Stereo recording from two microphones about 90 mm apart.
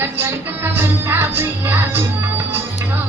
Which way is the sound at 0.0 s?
25° right (ahead or behind).